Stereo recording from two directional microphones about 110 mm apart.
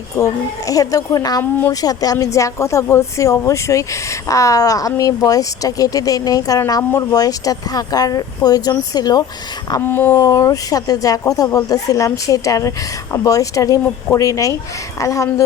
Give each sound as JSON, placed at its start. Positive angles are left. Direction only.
{"t": 0.7, "sound": "speech", "side_deg": 30}
{"t": 9.8, "sound": "speech", "side_deg": 20}
{"t": 10.2, "sound": "speech", "side_deg": 30}